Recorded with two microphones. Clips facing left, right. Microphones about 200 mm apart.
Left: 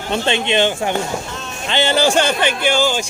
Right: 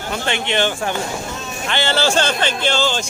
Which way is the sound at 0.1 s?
20° left (ahead or behind).